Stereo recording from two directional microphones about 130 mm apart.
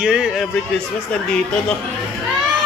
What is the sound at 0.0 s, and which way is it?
Speech, 5° right (ahead or behind).